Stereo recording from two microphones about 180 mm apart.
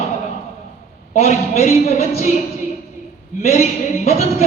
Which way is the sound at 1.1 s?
35° left (ahead or behind).